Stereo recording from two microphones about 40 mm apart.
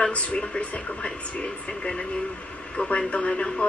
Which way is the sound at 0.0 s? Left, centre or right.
Left.